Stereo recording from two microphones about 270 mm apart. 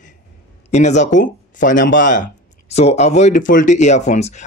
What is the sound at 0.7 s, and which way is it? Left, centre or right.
Speech, left.